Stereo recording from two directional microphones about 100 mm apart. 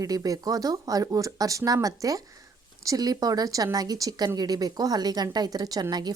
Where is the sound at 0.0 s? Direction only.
35° right (ahead or behind).